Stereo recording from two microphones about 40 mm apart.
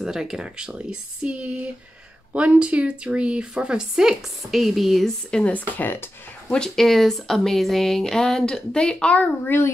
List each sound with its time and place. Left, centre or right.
0.0 s speech: centre
3.9 s a woman's voice: centre
5.4 s speech: left
6.5 s speech: centre
9.5 s a child's voice: left